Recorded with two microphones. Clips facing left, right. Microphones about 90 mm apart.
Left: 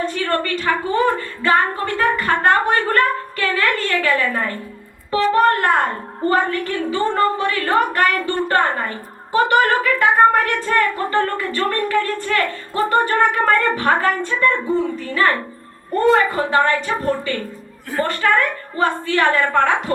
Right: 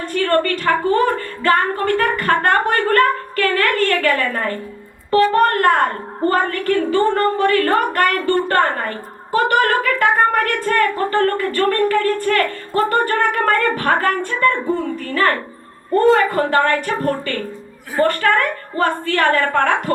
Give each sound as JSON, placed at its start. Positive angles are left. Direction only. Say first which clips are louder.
{"t": 0.0, "sound": "a woman's voice", "louder": "right 3 dB", "side_deg": -50}